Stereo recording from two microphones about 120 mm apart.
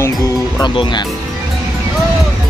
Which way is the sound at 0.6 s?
40° left (ahead or behind).